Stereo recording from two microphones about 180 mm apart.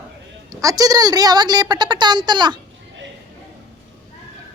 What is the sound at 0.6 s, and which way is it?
A woman's voice, 20° right (ahead or behind).